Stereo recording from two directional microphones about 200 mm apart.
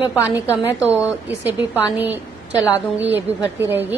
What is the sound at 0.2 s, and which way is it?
Speech, 15° left (ahead or behind).